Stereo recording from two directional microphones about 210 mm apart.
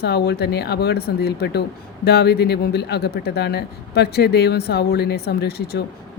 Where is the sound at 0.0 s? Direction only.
50° left (ahead or behind).